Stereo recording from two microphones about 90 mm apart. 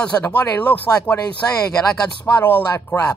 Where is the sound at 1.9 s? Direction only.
15° left (ahead or behind).